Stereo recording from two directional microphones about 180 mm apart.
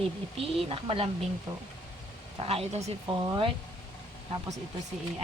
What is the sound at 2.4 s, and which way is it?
Speech, 35° right (ahead or behind).